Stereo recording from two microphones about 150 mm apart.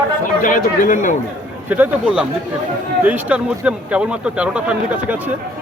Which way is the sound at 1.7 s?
10° right (ahead or behind).